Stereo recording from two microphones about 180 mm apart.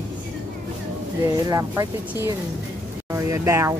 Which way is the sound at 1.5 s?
15° right (ahead or behind).